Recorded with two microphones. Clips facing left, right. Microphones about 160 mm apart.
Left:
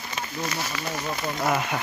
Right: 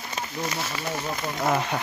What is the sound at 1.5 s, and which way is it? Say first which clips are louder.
Speech: right 1 dB; 25° right (ahead or behind).